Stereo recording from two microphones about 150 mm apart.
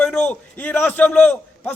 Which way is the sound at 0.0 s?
5° left (ahead or behind).